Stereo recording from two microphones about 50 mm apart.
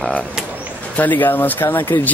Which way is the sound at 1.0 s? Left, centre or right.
Left.